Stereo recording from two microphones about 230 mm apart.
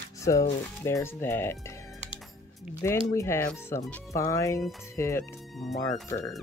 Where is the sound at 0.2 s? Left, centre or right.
Centre.